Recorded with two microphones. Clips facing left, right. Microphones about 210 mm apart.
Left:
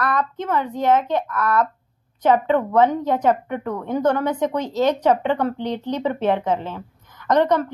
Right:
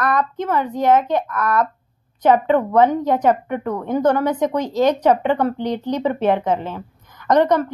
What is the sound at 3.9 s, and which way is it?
Speech, 10° right (ahead or behind).